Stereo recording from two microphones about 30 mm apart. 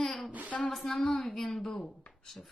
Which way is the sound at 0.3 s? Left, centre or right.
Right.